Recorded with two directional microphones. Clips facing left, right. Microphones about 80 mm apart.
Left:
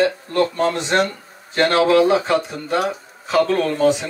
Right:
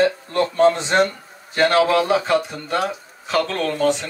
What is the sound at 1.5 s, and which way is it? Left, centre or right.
Speech, centre.